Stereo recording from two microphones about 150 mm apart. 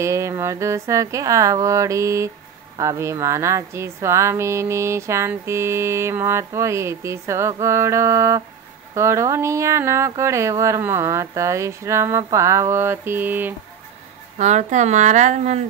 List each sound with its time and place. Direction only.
0.0 s a woman's voice: 20° right (ahead or behind)
14.4 s speech: 50° right (ahead or behind)